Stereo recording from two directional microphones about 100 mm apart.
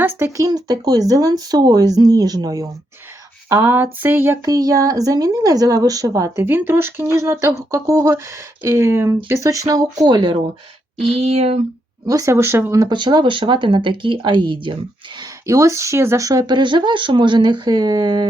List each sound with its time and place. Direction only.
0.0 s a sound: 20° right (ahead or behind)
0.3 s a woman's voice: 40° right (ahead or behind)
3.5 s speech: 25° right (ahead or behind)
4.4 s a woman's voice: 35° right (ahead or behind)
10.0 s speech: 45° right (ahead or behind)
11.1 s speech: 90° right
12.0 s speech: 35° right (ahead or behind)
12.8 s speech: 50° right (ahead or behind)
15.2 s speech: 35° right (ahead or behind)